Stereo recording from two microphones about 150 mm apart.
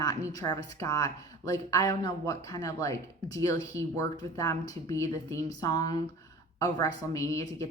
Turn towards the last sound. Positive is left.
turn(degrees=20)  # may be behind; listen again after turning